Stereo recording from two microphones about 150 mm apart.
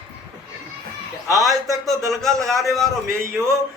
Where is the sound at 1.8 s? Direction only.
Centre (ahead or behind).